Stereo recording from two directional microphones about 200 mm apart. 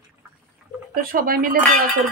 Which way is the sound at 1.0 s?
45° right (ahead or behind).